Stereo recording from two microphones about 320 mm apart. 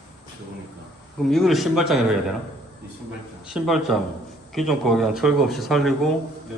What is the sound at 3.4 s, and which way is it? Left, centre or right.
A man's voice, centre.